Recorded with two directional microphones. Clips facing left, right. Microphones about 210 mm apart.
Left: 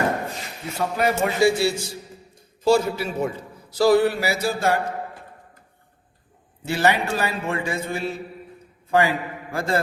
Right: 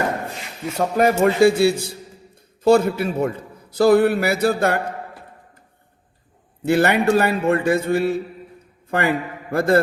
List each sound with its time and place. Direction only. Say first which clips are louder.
0.8 s a man's voice: right 5 dB; 45° right (ahead or behind)
6.7 s a man's voice: right 5 dB; 55° right (ahead or behind)